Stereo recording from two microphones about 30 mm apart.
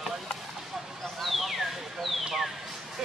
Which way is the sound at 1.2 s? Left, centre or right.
Centre.